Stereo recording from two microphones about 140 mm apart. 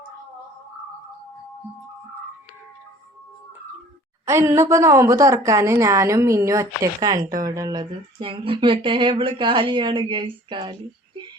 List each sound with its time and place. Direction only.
4.3 s a woman's voice: 20° right (ahead or behind); by 11.2 s 35° right (ahead or behind)